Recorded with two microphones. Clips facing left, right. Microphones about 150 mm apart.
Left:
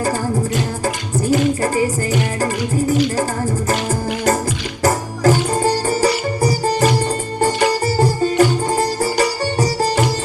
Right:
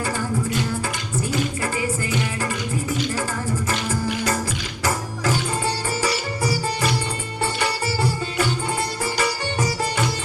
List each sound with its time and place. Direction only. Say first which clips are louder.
1.2 s music: left 9 dB; 40° left (ahead or behind)